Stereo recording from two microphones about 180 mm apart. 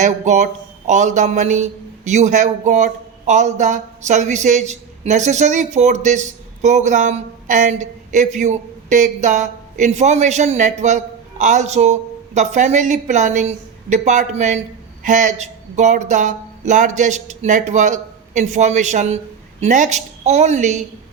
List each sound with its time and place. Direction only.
0.0 s speech: 40° right (ahead or behind)